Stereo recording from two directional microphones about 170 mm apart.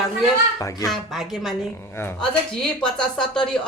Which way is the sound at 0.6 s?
20° left (ahead or behind).